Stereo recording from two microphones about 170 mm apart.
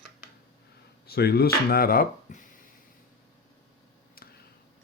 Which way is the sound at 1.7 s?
60° left (ahead or behind).